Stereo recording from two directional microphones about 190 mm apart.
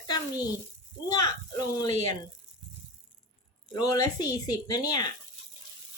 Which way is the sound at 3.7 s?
20° left (ahead or behind).